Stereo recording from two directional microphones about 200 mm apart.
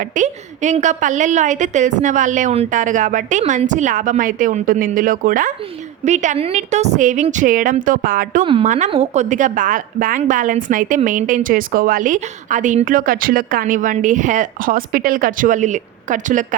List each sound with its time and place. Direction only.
0.2 s a woman's voice: 35° right (ahead or behind)